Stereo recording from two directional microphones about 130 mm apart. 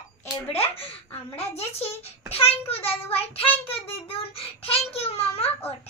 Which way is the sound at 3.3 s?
45° left (ahead or behind).